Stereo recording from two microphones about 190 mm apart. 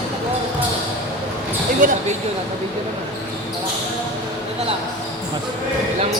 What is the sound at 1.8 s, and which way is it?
Speech, 45° right (ahead or behind).